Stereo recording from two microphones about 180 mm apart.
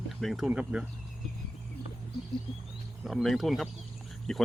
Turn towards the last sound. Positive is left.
turn(degrees=0)  # may be behind; listen again after turning